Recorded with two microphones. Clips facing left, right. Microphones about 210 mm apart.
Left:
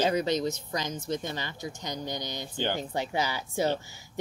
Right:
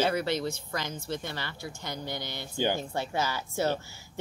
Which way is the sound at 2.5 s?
10° right (ahead or behind).